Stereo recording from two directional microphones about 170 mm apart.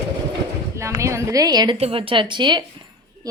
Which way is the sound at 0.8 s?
15° right (ahead or behind).